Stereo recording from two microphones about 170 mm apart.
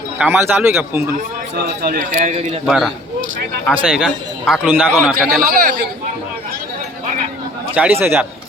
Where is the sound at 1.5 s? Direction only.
65° right (ahead or behind); by 2.6 s 45° right (ahead or behind).